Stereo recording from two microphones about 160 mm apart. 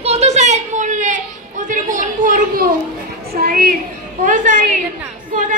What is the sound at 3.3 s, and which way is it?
A woman's voice, 65° right (ahead or behind).